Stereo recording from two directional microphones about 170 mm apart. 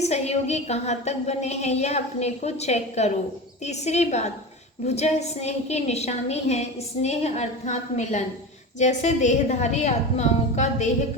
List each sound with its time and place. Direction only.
0.0 s a woman's voice: 40° left (ahead or behind)